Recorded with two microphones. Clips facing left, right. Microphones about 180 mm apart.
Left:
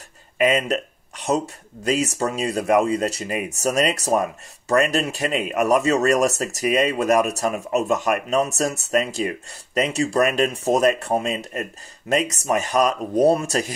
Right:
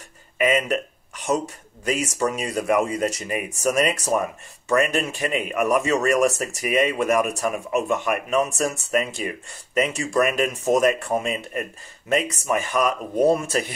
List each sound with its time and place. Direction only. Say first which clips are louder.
0.4 s speech: left 1 dB; 35° left (ahead or behind)